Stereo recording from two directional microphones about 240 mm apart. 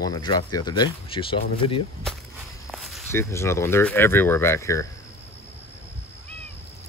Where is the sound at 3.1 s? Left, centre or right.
Centre.